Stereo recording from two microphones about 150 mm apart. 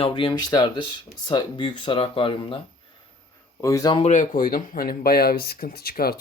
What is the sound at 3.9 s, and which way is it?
Speech, 50° left (ahead or behind).